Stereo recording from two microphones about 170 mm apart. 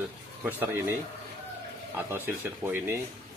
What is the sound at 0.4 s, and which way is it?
Speech, 10° right (ahead or behind).